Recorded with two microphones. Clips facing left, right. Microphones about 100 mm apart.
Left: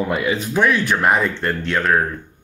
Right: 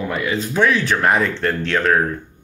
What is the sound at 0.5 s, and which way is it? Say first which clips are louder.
Speech: right 1 dB; 10° left (ahead or behind).